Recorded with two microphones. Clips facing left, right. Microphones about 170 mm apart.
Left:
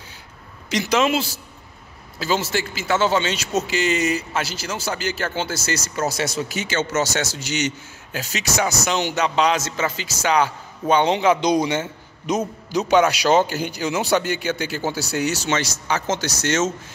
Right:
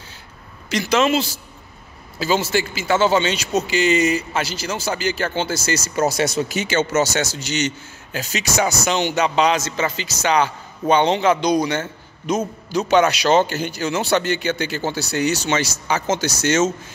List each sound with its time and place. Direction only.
0.7 s a man's voice: 15° left (ahead or behind)
2.1 s a man's voice: centre (ahead or behind)
5.9 s speech: 15° right (ahead or behind)
6.7 s a man's voice: 10° right (ahead or behind); by 11.3 s 10° left (ahead or behind)
11.4 s a man's voice: 20° left (ahead or behind); by 16.7 s centre (ahead or behind)